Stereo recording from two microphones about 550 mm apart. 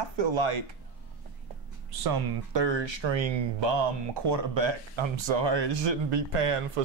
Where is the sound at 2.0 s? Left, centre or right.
Right.